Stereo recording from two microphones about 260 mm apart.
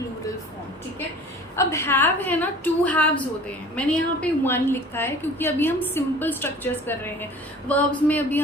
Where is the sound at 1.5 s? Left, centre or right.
Centre.